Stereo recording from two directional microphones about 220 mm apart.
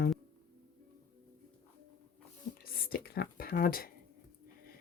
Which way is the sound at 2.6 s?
45° left (ahead or behind).